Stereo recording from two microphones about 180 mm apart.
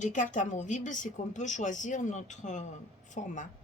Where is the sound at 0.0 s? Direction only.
45° left (ahead or behind).